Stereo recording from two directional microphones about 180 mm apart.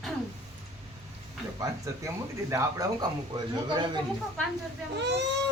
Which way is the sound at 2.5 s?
20° right (ahead or behind).